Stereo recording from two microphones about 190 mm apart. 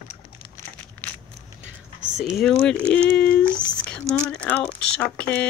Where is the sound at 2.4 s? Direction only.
5° left (ahead or behind).